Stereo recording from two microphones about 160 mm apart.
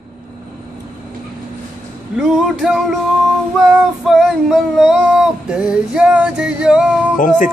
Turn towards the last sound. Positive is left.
turn(degrees=55)  # may be behind; listen again after turning